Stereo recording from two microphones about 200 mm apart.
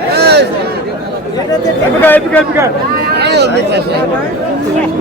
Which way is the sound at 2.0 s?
10° left (ahead or behind).